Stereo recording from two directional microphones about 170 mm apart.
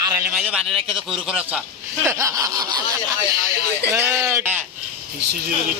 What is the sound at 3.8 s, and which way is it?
Speech, 15° right (ahead or behind).